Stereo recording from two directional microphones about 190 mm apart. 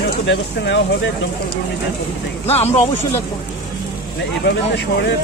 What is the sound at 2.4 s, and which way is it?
Speech, 35° left (ahead or behind).